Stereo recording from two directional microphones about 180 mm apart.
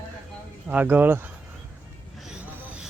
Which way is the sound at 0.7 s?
10° right (ahead or behind).